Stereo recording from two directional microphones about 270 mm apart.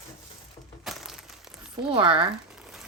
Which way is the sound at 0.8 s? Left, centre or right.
Centre.